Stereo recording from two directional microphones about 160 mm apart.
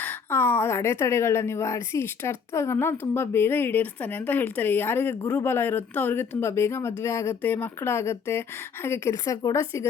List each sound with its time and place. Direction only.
0.0 s a woman's voice: 15° left (ahead or behind)